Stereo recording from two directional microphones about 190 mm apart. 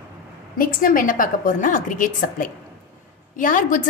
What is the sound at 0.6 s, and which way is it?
A woman's voice, 50° left (ahead or behind).